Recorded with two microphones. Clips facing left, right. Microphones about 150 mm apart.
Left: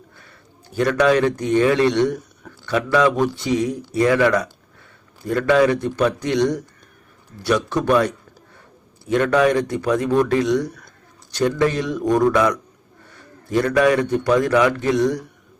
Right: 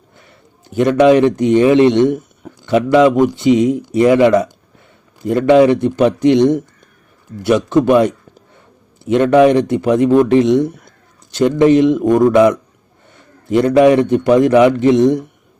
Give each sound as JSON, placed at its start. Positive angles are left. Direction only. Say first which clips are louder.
{"t": 0.8, "sound": "a man's voice", "louder": "right 7 dB", "side_deg": -20}